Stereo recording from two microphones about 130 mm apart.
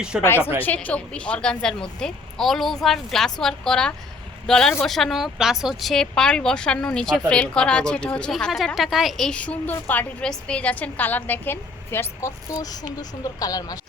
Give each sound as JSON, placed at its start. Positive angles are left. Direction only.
{"t": 0.2, "sound": "a woman's voice", "side_deg": 20}